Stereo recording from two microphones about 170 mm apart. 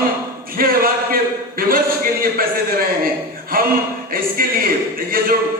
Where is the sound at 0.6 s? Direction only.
60° right (ahead or behind).